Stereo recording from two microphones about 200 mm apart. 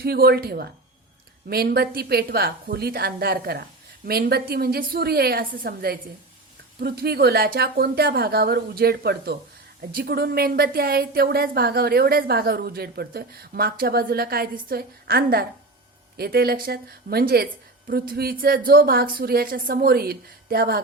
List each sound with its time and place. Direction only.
0.0 s speech: 50° right (ahead or behind)